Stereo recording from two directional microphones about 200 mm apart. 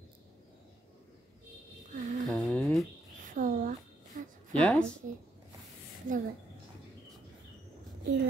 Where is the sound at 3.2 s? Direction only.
40° right (ahead or behind).